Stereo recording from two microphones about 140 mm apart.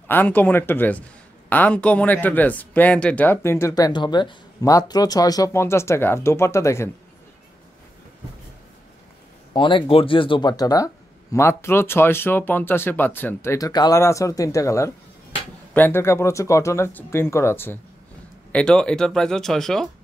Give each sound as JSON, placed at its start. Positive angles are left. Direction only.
{"t": 0.1, "sound": "speech", "side_deg": 15}
{"t": 9.5, "sound": "speech", "side_deg": 35}
{"t": 18.5, "sound": "speech", "side_deg": 5}